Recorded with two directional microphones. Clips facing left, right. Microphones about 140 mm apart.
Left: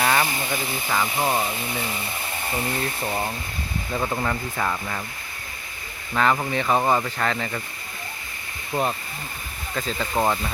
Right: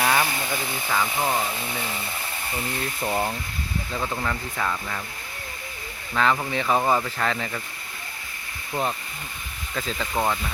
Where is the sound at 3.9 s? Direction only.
15° left (ahead or behind).